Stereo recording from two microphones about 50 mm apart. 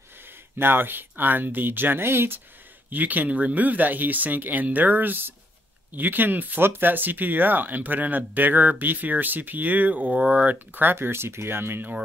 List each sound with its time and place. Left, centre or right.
0.6 s speech: right
2.9 s speech: right